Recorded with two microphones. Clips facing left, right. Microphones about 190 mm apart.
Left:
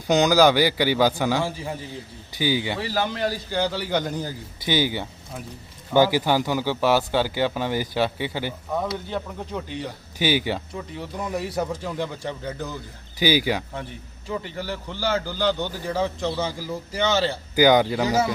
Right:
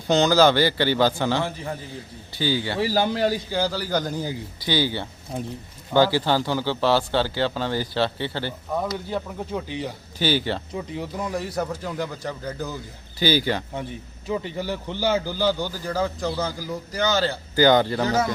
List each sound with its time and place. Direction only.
0.1 s speech: 15° left (ahead or behind)
2.8 s speech: 30° right (ahead or behind)
3.5 s a man's voice: centre (ahead or behind)
4.6 s speech: 20° left (ahead or behind)
8.7 s a man's voice: 5° right (ahead or behind)
10.2 s speech: 15° left (ahead or behind)
11.2 s a man's voice: centre (ahead or behind)
13.1 s speech: 10° left (ahead or behind)
14.3 s a man's voice: 10° right (ahead or behind); by 18.3 s 5° left (ahead or behind)